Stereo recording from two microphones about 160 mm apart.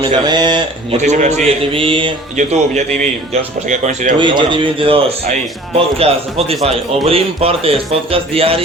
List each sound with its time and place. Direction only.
0.0 s a man's voice: 30° right (ahead or behind)
0.9 s a man's voice: 45° right (ahead or behind)
1.7 s speech: 35° right (ahead or behind)
2.3 s a man's voice: 50° right (ahead or behind)
4.2 s speech: 30° right (ahead or behind)